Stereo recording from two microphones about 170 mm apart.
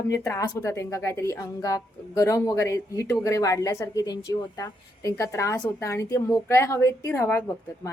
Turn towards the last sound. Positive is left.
turn(degrees=15)  # may be behind; listen again after turning